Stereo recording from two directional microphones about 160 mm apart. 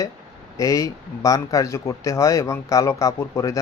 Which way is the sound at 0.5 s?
20° left (ahead or behind).